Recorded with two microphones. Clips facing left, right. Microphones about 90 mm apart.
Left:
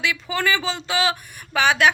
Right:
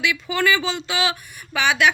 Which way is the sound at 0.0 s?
35° left (ahead or behind).